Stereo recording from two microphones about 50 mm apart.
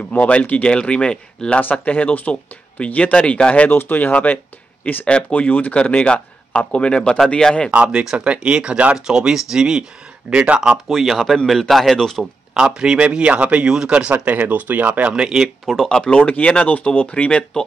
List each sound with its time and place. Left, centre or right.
0.2 s a man's voice: left
1.6 s a man's voice: left
3.6 s speech: left
5.0 s a man's voice: left
7.7 s speech: right
8.0 s speech: centre
10.3 s speech: right
10.9 s a man's voice: centre
12.2 s speech: centre; by 13.7 s right
13.7 s speech: centre
14.2 s speech: right
15.0 s speech: centre
15.4 s speech: centre
16.1 s a man's voice: left